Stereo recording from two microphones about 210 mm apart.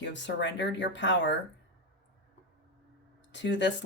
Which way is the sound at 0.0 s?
60° left (ahead or behind).